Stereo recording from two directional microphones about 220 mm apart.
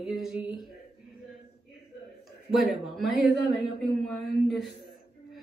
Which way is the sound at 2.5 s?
Centre (ahead or behind).